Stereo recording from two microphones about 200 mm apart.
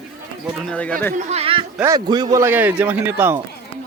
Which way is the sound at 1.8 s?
20° right (ahead or behind).